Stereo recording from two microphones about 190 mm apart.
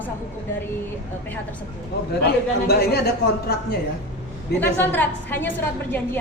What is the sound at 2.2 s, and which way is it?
Speech, 55° left (ahead or behind).